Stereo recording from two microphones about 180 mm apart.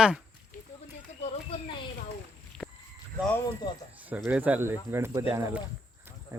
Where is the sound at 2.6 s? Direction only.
Centre (ahead or behind).